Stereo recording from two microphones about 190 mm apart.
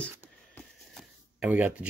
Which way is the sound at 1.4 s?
10° right (ahead or behind).